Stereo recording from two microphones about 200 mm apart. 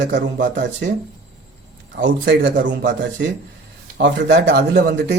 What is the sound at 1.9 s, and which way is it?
Speech, 40° right (ahead or behind).